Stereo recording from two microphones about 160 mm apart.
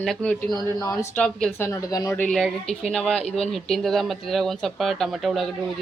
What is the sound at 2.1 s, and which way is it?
Speech, 5° left (ahead or behind).